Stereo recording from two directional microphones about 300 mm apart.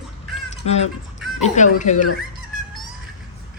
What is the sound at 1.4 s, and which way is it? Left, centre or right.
Speech, left.